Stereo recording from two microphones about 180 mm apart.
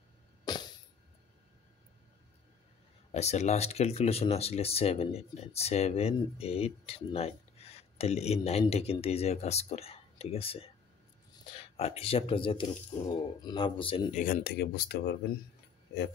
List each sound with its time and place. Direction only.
0.5 s music: 20° left (ahead or behind)
3.1 s speech: 40° left (ahead or behind)
14.1 s speech: 50° left (ahead or behind)